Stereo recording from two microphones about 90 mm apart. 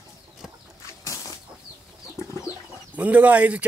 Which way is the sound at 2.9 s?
15° right (ahead or behind).